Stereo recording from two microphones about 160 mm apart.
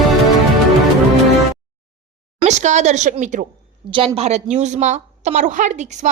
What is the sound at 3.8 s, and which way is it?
A woman's voice, 35° right (ahead or behind).